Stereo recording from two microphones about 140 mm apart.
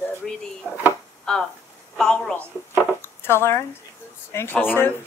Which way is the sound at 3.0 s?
15° left (ahead or behind).